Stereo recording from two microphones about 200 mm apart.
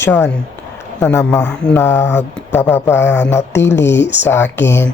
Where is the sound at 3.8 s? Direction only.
60° left (ahead or behind).